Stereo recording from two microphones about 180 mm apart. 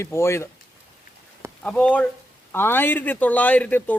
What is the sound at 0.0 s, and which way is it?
Speech, 15° left (ahead or behind).